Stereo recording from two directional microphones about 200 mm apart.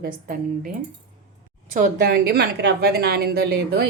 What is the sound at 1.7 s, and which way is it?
A woman's voice, 50° right (ahead or behind).